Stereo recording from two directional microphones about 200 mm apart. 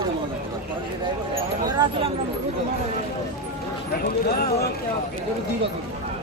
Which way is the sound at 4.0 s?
50° left (ahead or behind).